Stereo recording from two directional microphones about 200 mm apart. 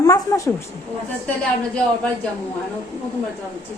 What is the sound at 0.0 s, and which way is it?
Speech, 15° left (ahead or behind).